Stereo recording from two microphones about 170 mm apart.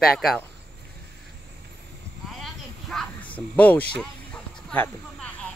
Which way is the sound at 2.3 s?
Centre (ahead or behind).